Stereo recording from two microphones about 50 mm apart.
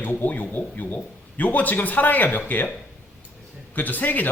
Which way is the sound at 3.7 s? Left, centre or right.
Left.